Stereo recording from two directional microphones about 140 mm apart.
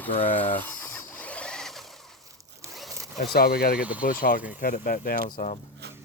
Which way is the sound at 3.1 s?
90° left.